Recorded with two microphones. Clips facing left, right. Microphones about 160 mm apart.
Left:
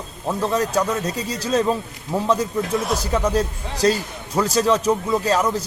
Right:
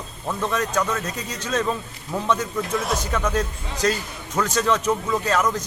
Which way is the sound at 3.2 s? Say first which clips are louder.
Left 3 dB; 35° left (ahead or behind).